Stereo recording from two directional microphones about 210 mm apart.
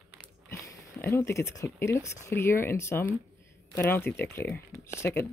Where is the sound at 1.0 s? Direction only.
15° left (ahead or behind).